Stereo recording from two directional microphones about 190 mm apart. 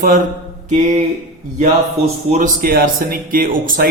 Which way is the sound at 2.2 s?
40° right (ahead or behind).